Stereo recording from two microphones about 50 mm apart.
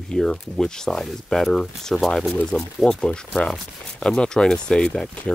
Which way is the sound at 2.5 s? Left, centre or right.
Centre.